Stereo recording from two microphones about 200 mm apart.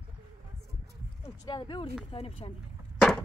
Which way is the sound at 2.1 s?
30° left (ahead or behind).